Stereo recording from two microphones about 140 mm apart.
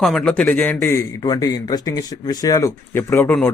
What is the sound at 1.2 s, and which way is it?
Speech, 25° left (ahead or behind).